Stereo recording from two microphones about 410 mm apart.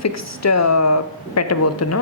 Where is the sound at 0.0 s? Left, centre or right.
Left.